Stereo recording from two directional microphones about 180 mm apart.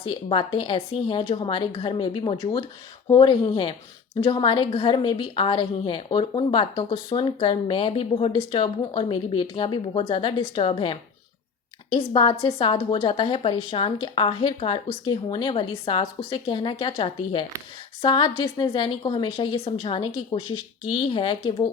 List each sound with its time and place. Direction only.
0.0 s a woman's voice: 30° left (ahead or behind)